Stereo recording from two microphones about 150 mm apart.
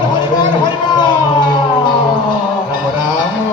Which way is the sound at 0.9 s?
30° left (ahead or behind).